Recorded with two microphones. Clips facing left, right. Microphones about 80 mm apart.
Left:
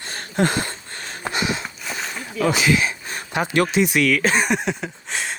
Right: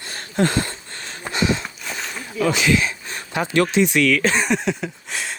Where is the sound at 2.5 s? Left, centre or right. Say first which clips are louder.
Even; centre.